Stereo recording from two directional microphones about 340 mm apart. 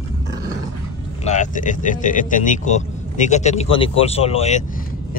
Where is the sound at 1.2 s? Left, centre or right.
Left.